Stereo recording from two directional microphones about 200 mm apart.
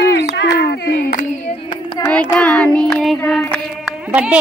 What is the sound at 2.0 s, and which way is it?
Child singing, 10° left (ahead or behind).